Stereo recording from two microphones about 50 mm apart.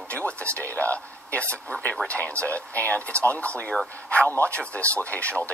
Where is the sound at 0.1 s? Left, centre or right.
Left.